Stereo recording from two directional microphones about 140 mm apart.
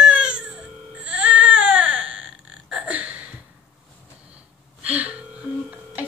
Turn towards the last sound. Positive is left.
turn(degrees=-10)  # may be behind; listen again after turning